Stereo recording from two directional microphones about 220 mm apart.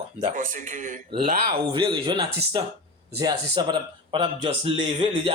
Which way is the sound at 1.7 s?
20° right (ahead or behind).